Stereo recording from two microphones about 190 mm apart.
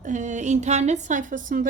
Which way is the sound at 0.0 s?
40° right (ahead or behind).